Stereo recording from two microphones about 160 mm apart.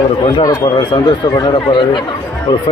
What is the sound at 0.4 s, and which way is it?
Speech, 25° left (ahead or behind).